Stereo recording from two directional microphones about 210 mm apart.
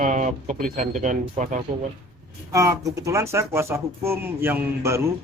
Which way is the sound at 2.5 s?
15° right (ahead or behind).